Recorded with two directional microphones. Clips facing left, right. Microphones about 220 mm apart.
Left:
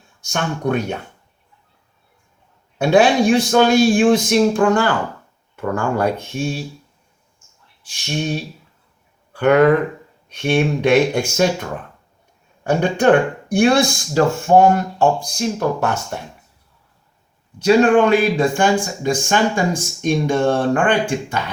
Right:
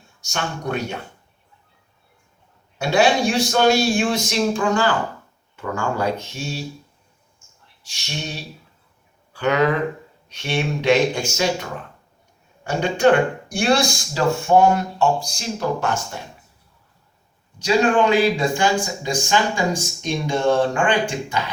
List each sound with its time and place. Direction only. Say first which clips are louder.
0.2 s speech: left 5 dB; 55° left (ahead or behind)
2.7 s a man's voice: left 4 dB; 55° left (ahead or behind)
7.9 s a man's voice: left 8 dB; 50° left (ahead or behind)
12.6 s a man's voice: left 2 dB; 55° left (ahead or behind)
17.6 s a man's voice: left 5 dB; 55° left (ahead or behind)